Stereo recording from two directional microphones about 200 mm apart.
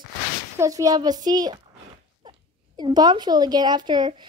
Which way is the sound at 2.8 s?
20° right (ahead or behind).